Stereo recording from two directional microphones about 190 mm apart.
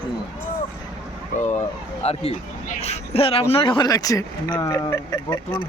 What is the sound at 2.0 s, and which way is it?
A man's voice, 35° left (ahead or behind).